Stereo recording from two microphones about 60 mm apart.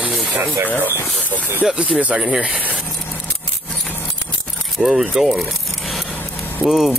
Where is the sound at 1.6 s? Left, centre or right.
Centre.